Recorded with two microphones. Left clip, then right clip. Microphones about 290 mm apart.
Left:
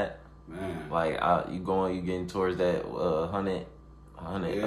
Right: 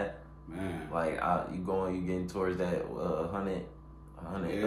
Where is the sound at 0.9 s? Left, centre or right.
Left.